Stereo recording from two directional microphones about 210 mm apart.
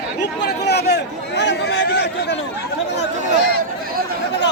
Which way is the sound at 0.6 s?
50° left (ahead or behind).